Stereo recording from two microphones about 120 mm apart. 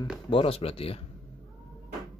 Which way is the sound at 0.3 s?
50° left (ahead or behind).